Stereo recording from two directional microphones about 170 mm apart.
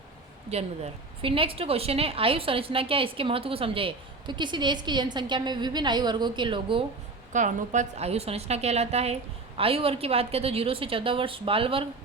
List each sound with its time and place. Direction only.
0.5 s a woman's voice: 35° right (ahead or behind)
7.3 s a woman's voice: 45° right (ahead or behind)